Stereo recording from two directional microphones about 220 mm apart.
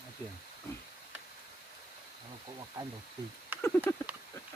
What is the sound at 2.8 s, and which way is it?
Speech, 20° right (ahead or behind).